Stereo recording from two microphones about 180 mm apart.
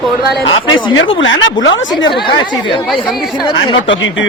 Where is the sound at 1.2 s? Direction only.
90° left.